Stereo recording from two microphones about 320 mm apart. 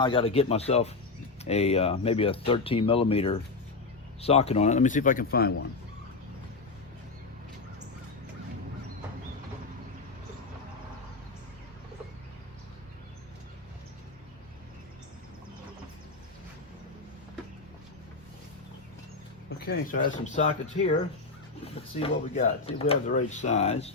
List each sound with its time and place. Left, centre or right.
0.0 s speech: centre
19.5 s speech: left
21.9 s speech: centre